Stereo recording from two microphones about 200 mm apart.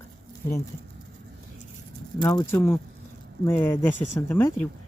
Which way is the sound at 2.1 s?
20° left (ahead or behind).